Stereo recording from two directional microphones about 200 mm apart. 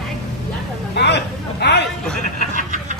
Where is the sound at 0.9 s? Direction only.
55° left (ahead or behind).